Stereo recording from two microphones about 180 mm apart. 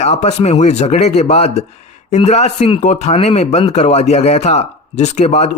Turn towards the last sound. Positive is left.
turn(degrees=40)  # may be behind; listen again after turning